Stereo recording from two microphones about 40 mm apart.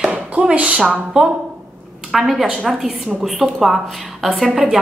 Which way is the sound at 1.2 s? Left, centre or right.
Centre.